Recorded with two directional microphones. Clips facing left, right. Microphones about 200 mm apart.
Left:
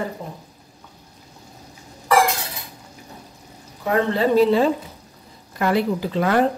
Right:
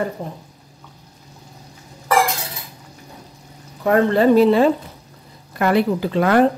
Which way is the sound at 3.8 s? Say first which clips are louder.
Right 5 dB; 55° right (ahead or behind).